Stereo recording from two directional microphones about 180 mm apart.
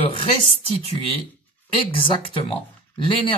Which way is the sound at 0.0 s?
30° left (ahead or behind).